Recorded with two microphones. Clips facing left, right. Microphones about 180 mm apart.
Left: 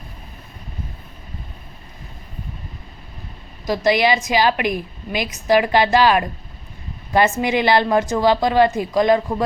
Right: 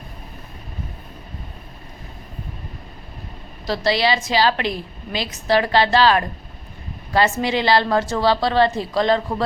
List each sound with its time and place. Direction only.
3.7 s a woman's voice: 15° left (ahead or behind)